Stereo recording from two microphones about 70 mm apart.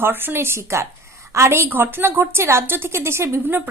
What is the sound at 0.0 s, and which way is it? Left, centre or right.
A woman's voice, right.